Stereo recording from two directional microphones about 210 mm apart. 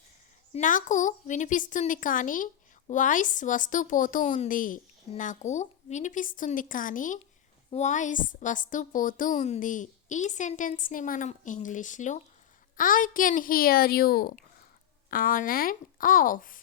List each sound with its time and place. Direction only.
0.5 s a woman's voice: 40° left (ahead or behind)